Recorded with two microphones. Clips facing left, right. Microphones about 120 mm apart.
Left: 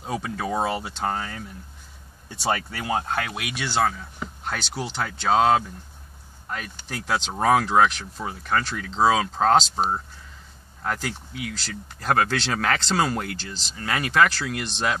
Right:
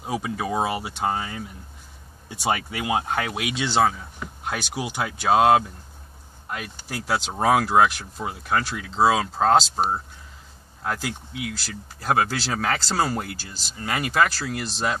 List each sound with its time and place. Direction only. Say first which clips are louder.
0.0 s speech: right 1 dB; 5° right (ahead or behind)